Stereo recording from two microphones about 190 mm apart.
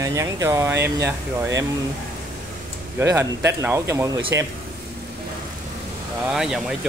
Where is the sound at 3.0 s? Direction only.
15° right (ahead or behind).